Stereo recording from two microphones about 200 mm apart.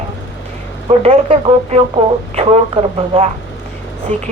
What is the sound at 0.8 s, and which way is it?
Speech, 30° right (ahead or behind).